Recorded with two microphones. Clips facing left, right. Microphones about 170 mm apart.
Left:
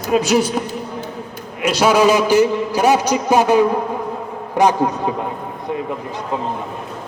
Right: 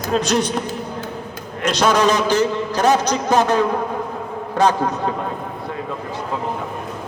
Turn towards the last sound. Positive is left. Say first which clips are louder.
# left 2 dB
turn(degrees=15)  # may be behind; listen again after turning